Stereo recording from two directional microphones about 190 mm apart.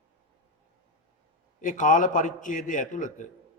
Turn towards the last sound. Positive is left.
turn(degrees=40)  # may be behind; listen again after turning